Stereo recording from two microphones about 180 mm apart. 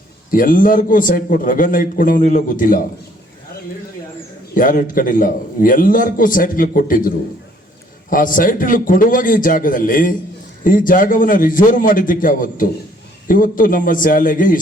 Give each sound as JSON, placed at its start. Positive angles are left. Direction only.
{"t": 0.3, "sound": "a man's voice", "side_deg": 50}
{"t": 4.5, "sound": "a man's voice", "side_deg": 50}
{"t": 8.1, "sound": "a man's voice", "side_deg": 50}